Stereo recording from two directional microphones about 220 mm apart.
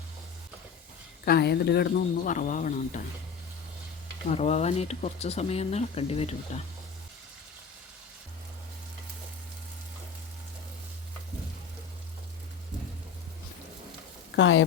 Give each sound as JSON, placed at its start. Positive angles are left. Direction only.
{"t": 1.2, "sound": "speech", "side_deg": 45}
{"t": 4.3, "sound": "speech", "side_deg": 30}
{"t": 14.3, "sound": "speech", "side_deg": 60}